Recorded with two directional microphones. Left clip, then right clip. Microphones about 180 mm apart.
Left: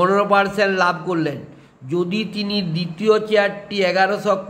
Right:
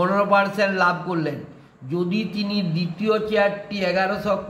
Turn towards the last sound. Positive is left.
turn(degrees=40)  # may be behind; listen again after turning